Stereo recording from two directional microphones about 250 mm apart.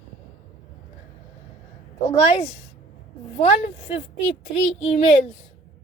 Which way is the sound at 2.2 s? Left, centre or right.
Left.